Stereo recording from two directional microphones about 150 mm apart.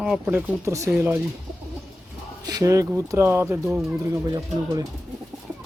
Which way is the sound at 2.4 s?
25° right (ahead or behind).